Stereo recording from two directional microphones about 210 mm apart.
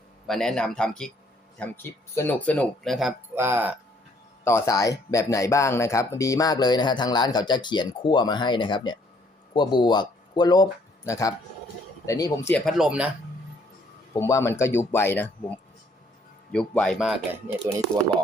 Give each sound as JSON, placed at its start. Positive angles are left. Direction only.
{"t": 0.3, "sound": "speech", "side_deg": 5}
{"t": 3.3, "sound": "speech", "side_deg": -10}
{"t": 4.4, "sound": "speech", "side_deg": 15}
{"t": 14.1, "sound": "speech", "side_deg": 15}